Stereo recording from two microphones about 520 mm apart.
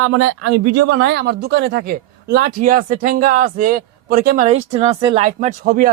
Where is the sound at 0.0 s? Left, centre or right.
Right.